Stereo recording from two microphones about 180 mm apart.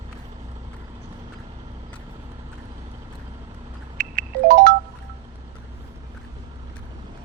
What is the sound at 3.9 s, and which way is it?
Ringtone, 50° right (ahead or behind).